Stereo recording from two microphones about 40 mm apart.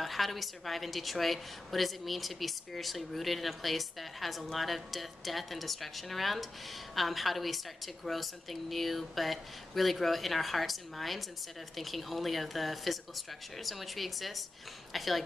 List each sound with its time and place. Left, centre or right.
0.0 s a woman's voice: centre